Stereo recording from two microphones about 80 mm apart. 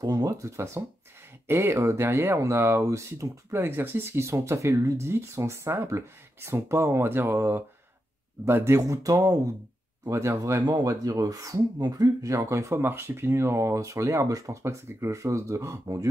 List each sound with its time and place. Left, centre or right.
0.0 s speech: right
8.8 s speech: right
10.6 s speech: right